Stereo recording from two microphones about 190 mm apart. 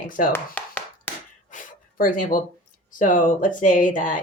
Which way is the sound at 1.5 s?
45° left (ahead or behind).